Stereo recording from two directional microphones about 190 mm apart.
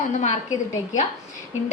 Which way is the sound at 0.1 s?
35° left (ahead or behind).